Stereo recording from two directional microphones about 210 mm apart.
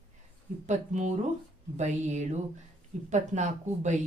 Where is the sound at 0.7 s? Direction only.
35° right (ahead or behind).